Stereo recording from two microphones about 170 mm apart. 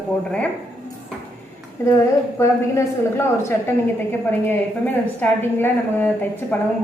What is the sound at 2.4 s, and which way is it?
A woman's voice, 15° left (ahead or behind).